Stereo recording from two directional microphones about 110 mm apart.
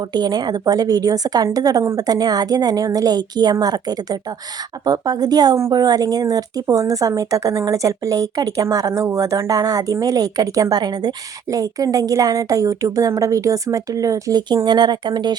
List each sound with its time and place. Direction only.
0.0 s a woman's voice: 40° right (ahead or behind)